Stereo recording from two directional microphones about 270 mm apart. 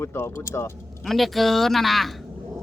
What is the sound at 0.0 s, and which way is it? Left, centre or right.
Speech, centre.